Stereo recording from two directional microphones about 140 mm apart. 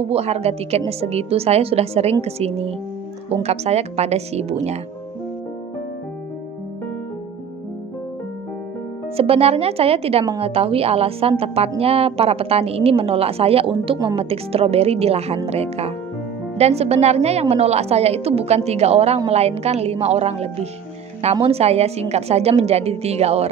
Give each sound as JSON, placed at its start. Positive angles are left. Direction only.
{"t": 0.0, "sound": "a woman's voice", "side_deg": -50}
{"t": 9.1, "sound": "a woman's voice", "side_deg": -45}